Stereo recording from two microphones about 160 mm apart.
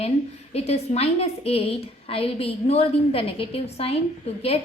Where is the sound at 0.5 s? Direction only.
40° left (ahead or behind).